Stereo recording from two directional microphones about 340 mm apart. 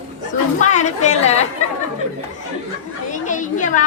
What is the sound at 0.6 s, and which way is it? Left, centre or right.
Chatter, left.